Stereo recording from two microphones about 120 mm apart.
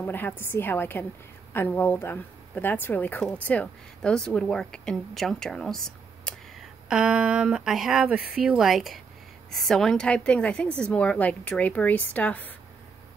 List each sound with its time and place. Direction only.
0.0 s a woman's voice: 15° left (ahead or behind)
6.9 s a woman's voice: 10° right (ahead or behind); by 12.5 s 15° left (ahead or behind)